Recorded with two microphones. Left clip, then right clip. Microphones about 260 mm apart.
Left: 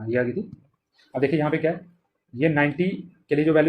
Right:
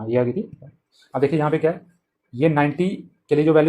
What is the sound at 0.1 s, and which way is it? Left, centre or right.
Speech, centre.